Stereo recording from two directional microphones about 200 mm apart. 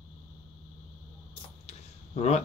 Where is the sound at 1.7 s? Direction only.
30° left (ahead or behind).